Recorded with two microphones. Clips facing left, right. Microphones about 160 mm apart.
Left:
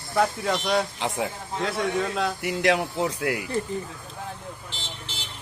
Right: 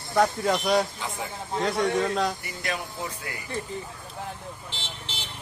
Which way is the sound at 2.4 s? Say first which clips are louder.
Left 10 dB; 80° left.